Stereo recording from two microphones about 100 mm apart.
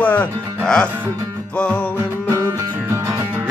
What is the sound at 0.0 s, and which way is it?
Speech, 15° left (ahead or behind).